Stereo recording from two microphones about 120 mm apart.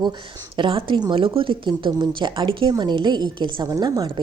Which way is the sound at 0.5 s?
45° right (ahead or behind).